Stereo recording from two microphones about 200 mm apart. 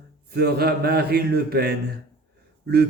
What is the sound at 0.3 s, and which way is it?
Speech, 55° right (ahead or behind).